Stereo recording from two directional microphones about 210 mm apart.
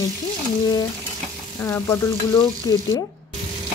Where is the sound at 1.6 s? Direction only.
10° left (ahead or behind).